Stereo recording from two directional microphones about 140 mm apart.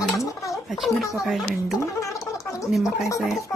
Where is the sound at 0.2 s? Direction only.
20° left (ahead or behind).